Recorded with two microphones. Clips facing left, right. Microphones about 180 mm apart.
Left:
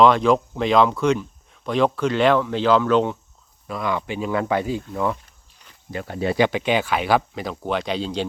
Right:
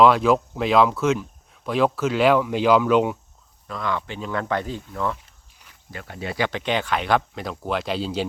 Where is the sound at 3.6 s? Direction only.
10° left (ahead or behind).